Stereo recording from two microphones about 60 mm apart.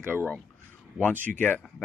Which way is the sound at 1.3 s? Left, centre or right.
Left.